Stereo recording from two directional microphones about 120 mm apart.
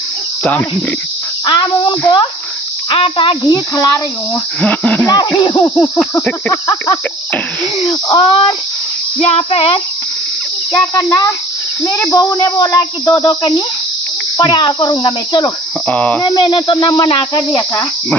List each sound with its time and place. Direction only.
0.4 s cricket: 10° left (ahead or behind)
1.4 s speech: 40° left (ahead or behind)
3.4 s speech: 30° left (ahead or behind)
4.6 s speech: 10° left (ahead or behind)
5.1 s speech: 35° left (ahead or behind)
7.9 s speech: 35° left (ahead or behind)
9.3 s cricket: 55° left (ahead or behind)
10.8 s speech: 30° left (ahead or behind)
15.9 s speech: 10° left (ahead or behind)
16.3 s speech: 40° left (ahead or behind)
17.4 s speech: 30° left (ahead or behind)